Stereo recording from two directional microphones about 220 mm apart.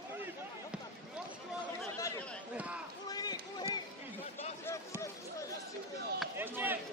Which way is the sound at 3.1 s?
20° left (ahead or behind).